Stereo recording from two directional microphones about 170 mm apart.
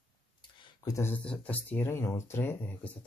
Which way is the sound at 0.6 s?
20° left (ahead or behind).